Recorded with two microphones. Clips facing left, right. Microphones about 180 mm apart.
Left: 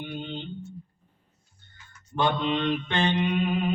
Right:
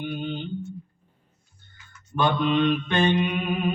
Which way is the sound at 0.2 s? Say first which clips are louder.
Right 4 dB; 20° left (ahead or behind).